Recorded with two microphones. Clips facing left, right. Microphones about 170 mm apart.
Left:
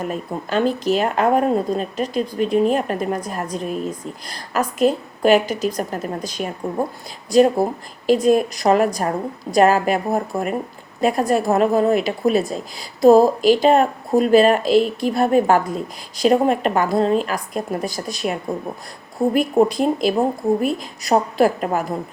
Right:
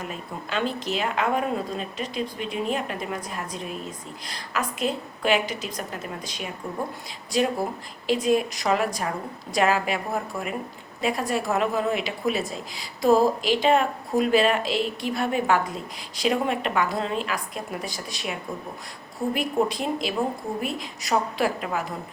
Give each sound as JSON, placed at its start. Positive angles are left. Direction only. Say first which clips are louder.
{"t": 0.0, "sound": "a woman's voice", "louder": "left 9 dB", "side_deg": 45}